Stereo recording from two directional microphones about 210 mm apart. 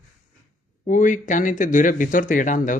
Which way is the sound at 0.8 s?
35° left (ahead or behind).